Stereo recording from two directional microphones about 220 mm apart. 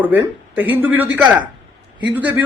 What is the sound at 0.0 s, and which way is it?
A man's voice, 10° right (ahead or behind).